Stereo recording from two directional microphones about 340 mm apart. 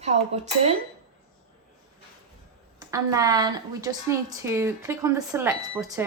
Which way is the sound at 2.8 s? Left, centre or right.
Centre.